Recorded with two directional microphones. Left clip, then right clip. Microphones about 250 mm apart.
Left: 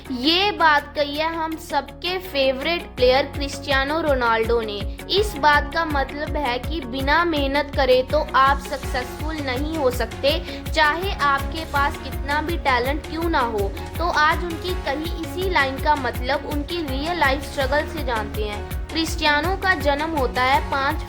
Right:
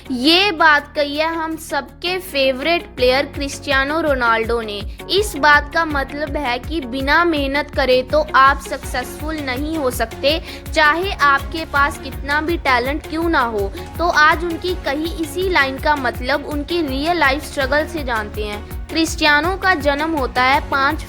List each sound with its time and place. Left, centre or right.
0.1 s speech: centre